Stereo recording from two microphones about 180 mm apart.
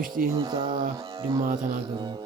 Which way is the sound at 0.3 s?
25° right (ahead or behind).